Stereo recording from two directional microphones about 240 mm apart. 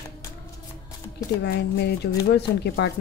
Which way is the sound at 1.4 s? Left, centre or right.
Left.